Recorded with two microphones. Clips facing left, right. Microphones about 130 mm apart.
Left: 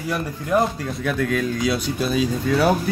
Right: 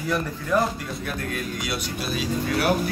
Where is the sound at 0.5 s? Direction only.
15° left (ahead or behind).